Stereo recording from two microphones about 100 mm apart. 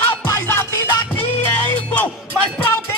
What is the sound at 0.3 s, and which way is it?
Music, 25° left (ahead or behind).